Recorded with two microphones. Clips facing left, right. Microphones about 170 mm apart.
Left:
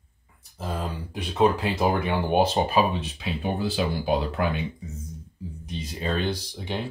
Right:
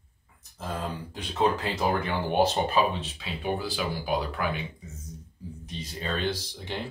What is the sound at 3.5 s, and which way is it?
Speech, 25° left (ahead or behind).